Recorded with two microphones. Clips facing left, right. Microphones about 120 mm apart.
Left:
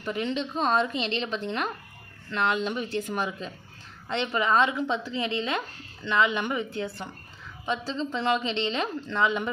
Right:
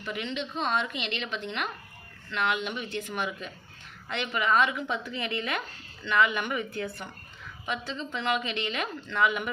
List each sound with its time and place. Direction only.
0.0 s a woman's voice: 35° left (ahead or behind)